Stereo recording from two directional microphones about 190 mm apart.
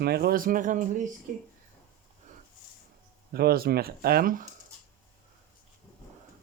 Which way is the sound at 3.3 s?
55° right (ahead or behind).